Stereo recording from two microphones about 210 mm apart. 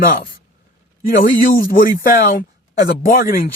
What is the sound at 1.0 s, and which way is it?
Speech, 45° left (ahead or behind).